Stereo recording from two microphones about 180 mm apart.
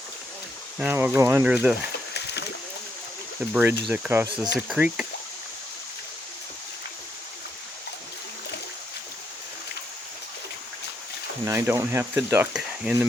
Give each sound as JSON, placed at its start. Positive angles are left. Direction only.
{"t": 0.8, "sound": "speech", "side_deg": -10}
{"t": 2.1, "sound": "a sound", "side_deg": 70}
{"t": 3.5, "sound": "speech", "side_deg": -10}
{"t": 11.4, "sound": "speech", "side_deg": -15}